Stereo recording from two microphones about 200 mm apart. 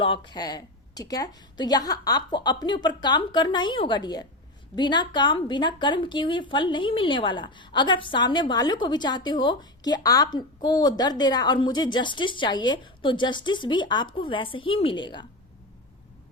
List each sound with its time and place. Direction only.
0.0 s a woman's voice: 25° left (ahead or behind)